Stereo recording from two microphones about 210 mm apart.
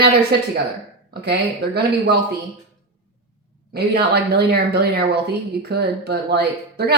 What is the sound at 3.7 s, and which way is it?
A woman's voice, 50° right (ahead or behind).